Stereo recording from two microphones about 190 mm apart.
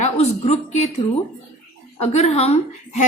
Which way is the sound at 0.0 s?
35° left (ahead or behind).